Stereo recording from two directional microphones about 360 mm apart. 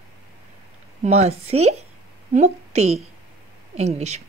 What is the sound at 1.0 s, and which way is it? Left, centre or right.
A woman's voice, centre.